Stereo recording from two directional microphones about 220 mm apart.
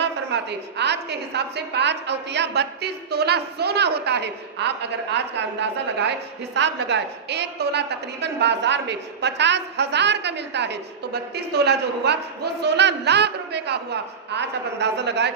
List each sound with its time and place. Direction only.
0.0 s a woman's voice: 50° right (ahead or behind)